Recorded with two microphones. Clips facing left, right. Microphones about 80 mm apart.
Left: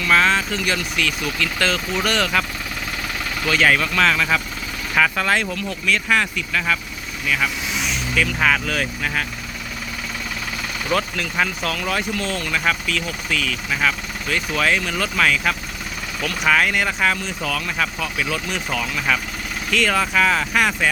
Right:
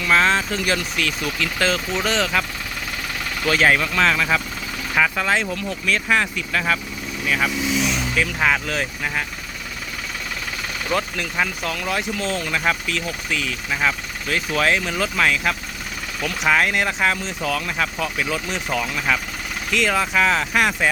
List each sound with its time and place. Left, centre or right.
0.0 s speech: right
3.4 s speech: right
8.4 s speech: centre
12.1 s speech: right
14.7 s speech: centre
18.9 s speech: centre